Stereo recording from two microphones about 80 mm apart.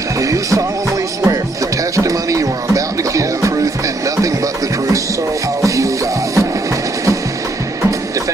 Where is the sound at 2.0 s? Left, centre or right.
Right.